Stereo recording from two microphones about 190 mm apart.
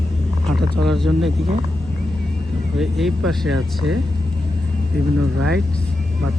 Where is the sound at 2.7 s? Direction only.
Centre (ahead or behind).